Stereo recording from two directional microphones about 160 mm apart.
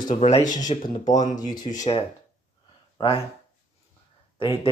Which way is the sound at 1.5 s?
25° left (ahead or behind).